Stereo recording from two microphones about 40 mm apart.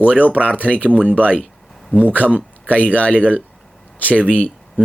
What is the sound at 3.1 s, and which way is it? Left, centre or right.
Speech, right.